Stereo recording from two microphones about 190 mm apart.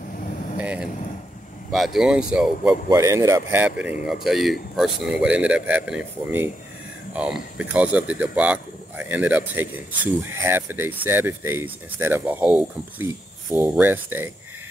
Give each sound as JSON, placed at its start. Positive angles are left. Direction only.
{"t": 0.6, "sound": "vehicle", "side_deg": -5}
{"t": 1.7, "sound": "speech", "side_deg": 0}
{"t": 2.9, "sound": "a man's voice", "side_deg": -15}
{"t": 4.0, "sound": "a man's voice", "side_deg": 0}